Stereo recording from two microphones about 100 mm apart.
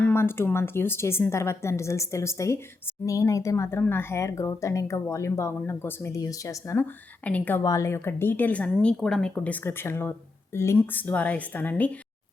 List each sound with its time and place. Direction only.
0.0 s a woman's voice: 25° left (ahead or behind)
6.8 s speech: 15° left (ahead or behind)
7.6 s speech: 30° left (ahead or behind); by 11.9 s 15° left (ahead or behind)